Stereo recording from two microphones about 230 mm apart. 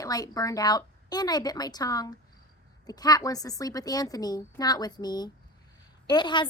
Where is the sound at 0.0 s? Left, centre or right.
Centre.